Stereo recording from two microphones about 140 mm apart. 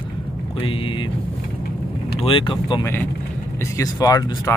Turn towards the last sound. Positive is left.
turn(degrees=25)  # may be behind; listen again after turning